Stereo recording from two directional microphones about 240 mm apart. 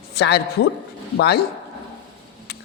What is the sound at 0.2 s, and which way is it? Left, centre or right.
A man's voice, left.